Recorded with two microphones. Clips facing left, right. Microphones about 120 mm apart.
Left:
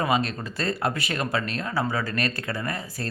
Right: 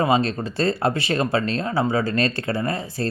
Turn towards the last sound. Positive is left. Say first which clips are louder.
# right 6 dB
turn(degrees=-30)  # may be behind; listen again after turning